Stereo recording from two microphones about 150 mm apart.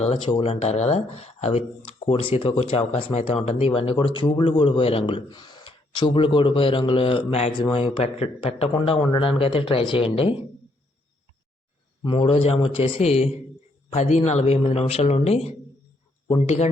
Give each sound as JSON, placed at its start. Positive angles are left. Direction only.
{"t": 0.0, "sound": "speech", "side_deg": 30}
{"t": 12.0, "sound": "a man's voice", "side_deg": 35}